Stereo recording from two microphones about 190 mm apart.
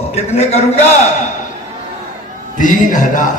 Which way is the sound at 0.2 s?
35° left (ahead or behind).